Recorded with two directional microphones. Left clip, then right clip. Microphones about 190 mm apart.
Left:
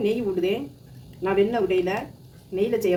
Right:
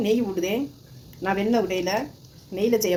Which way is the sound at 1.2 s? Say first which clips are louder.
Left 2 dB; 55° right (ahead or behind).